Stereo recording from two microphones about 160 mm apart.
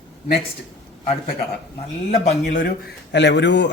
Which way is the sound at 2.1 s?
50° left (ahead or behind).